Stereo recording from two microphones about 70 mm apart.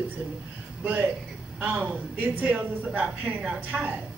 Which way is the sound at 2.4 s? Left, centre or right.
Right.